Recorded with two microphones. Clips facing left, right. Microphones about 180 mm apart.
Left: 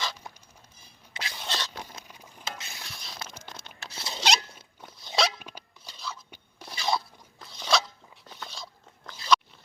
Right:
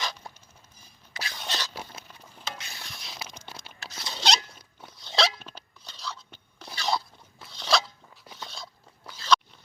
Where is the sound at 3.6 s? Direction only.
10° left (ahead or behind).